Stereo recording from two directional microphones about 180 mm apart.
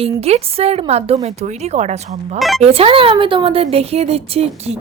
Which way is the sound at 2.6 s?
30° right (ahead or behind).